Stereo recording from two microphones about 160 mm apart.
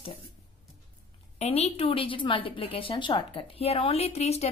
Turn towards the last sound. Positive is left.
turn(degrees=40)  # may be behind; listen again after turning